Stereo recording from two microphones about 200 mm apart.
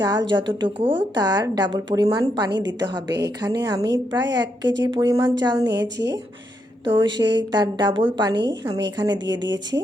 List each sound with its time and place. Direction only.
0.0 s a woman's voice: 20° right (ahead or behind)
5.8 s speech: 60° right (ahead or behind)
6.8 s a woman's voice: 25° right (ahead or behind)